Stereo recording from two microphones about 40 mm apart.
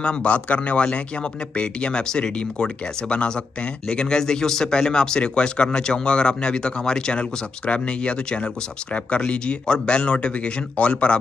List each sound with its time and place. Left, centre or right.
0.0 s speech: left